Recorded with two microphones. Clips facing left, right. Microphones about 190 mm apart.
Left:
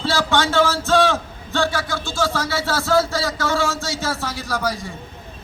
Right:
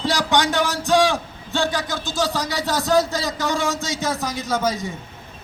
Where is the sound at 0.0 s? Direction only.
15° right (ahead or behind).